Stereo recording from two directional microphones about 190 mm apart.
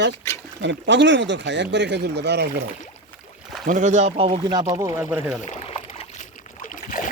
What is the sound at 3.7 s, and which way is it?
Speech, 40° right (ahead or behind).